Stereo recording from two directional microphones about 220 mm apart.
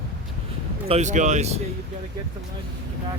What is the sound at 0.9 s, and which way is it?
Speech, 30° right (ahead or behind).